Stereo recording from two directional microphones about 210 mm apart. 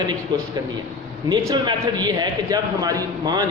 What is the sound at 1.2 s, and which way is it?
A man's voice, 20° right (ahead or behind).